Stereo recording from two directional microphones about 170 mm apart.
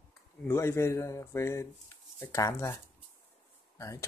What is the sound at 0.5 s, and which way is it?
Speech, 15° left (ahead or behind).